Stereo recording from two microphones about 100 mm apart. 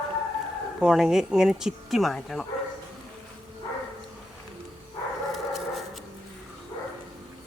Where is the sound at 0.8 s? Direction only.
5° right (ahead or behind).